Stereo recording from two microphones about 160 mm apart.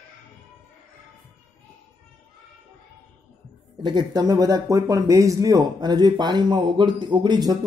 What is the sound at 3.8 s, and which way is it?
Speech, 25° right (ahead or behind).